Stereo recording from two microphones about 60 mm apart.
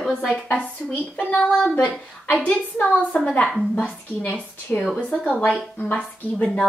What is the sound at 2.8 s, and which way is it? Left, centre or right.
Speech, left.